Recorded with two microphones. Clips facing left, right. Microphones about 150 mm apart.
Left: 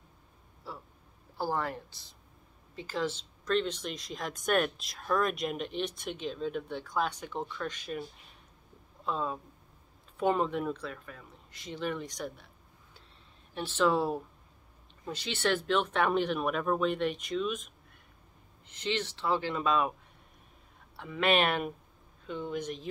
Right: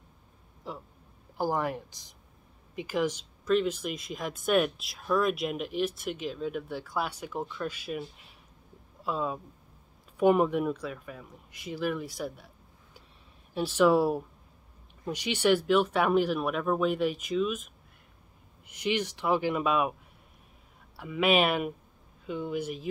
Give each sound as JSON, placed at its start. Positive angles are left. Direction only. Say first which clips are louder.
{"t": 0.7, "sound": "a sound", "louder": "right 4 dB", "side_deg": -15}
{"t": 1.4, "sound": "speech", "louder": "right 3 dB", "side_deg": -15}
{"t": 13.6, "sound": "speech", "louder": "right 5 dB", "side_deg": -10}
{"t": 18.7, "sound": "speech", "louder": "right 4 dB", "side_deg": -10}
{"t": 20.9, "sound": "speech", "louder": "right 2 dB", "side_deg": -5}